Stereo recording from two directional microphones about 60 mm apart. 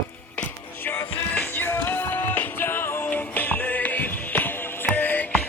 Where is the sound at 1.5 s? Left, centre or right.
Left.